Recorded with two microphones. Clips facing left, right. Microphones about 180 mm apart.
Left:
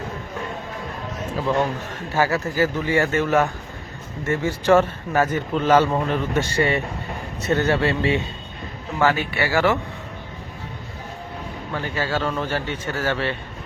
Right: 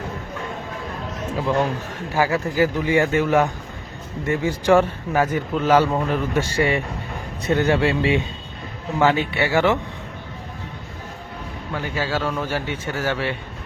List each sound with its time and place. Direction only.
1.3 s a man's voice: 10° right (ahead or behind)
11.7 s a man's voice: 10° right (ahead or behind)